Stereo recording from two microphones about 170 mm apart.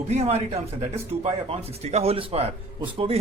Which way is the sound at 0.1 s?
40° right (ahead or behind).